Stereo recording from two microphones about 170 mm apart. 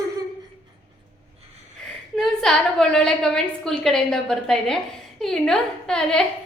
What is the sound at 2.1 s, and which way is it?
A woman's voice, centre (ahead or behind).